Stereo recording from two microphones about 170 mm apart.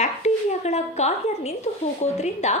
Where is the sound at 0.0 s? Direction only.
40° left (ahead or behind).